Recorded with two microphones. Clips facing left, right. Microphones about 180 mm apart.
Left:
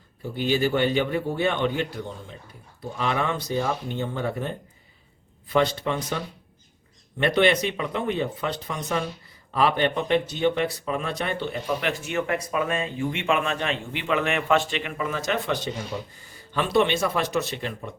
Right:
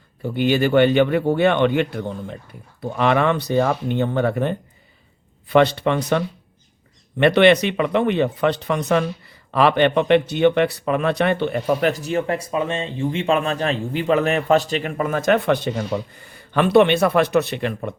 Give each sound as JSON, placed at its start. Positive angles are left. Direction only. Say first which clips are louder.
{"t": 0.2, "sound": "speech", "louder": "right 5 dB", "side_deg": -65}
{"t": 2.8, "sound": "speech", "louder": "right 8 dB", "side_deg": -70}